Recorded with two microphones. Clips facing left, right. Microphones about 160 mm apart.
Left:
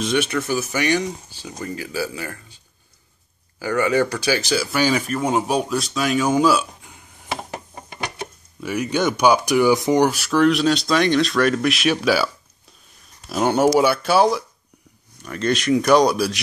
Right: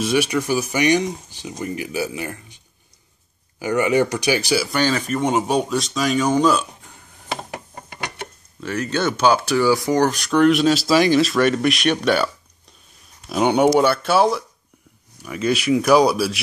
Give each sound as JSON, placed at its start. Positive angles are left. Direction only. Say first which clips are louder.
{"t": 0.0, "sound": "speech", "louder": "right 2 dB", "side_deg": -10}
{"t": 4.6, "sound": "speech", "louder": "even", "side_deg": 10}
{"t": 7.7, "sound": "gears", "louder": "left 1 dB", "side_deg": 20}
{"t": 8.5, "sound": "speech", "louder": "left 1 dB", "side_deg": 10}
{"t": 10.0, "sound": "speech", "louder": "right 1 dB", "side_deg": 5}
{"t": 13.3, "sound": "speech", "louder": "right 1 dB", "side_deg": 0}